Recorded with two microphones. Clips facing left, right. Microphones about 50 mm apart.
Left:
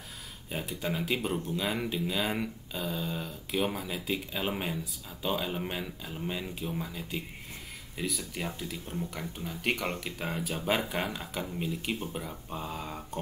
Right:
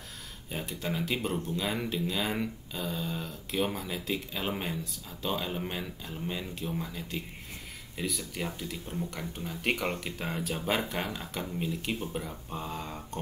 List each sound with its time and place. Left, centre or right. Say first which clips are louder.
0.5 s speech: left 1 dB; centre